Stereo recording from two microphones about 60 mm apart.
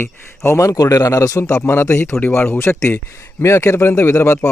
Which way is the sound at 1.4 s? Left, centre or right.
Left.